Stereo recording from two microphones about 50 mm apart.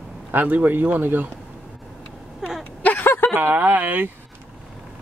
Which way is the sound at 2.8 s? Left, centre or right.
Left.